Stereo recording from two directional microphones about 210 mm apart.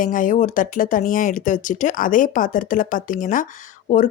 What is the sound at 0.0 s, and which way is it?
Speech, 40° left (ahead or behind).